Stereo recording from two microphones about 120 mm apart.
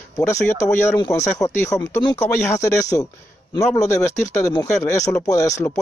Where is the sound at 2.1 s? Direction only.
20° left (ahead or behind).